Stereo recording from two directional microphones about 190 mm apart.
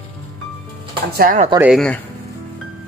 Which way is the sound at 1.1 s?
50° right (ahead or behind).